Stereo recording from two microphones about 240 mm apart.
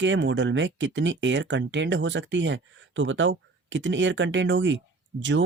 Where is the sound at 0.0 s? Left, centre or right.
Right.